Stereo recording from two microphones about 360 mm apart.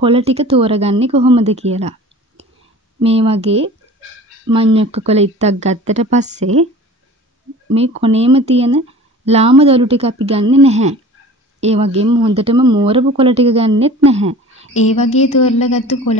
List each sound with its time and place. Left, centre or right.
0.0 s speech: centre
7.7 s speech: centre
15.0 s a woman's voice: centre
15.2 s a woman's voice: left